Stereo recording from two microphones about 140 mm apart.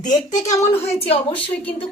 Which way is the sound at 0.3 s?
60° left (ahead or behind).